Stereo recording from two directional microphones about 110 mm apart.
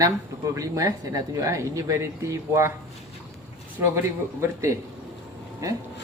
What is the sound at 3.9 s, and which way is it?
Speech, 25° right (ahead or behind).